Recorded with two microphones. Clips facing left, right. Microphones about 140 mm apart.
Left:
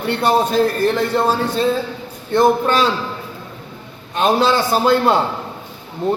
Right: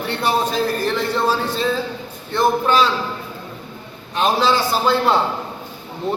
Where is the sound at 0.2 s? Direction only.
50° left (ahead or behind).